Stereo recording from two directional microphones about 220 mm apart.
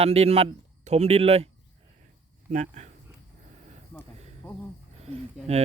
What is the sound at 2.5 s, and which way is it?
Speech, 35° right (ahead or behind).